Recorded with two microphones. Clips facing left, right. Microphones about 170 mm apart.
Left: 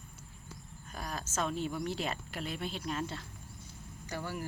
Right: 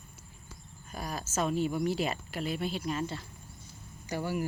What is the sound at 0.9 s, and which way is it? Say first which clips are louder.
Speech: right 3 dB; 10° right (ahead or behind).